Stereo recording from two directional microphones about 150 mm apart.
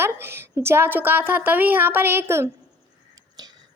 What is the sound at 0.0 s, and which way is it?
A woman's voice, 15° right (ahead or behind).